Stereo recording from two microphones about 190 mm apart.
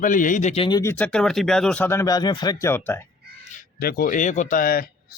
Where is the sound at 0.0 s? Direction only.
45° left (ahead or behind).